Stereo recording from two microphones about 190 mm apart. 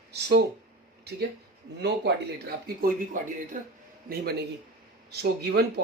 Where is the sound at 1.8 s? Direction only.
60° right (ahead or behind).